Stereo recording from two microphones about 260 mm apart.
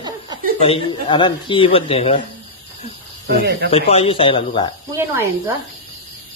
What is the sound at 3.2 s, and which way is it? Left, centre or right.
Speech, right.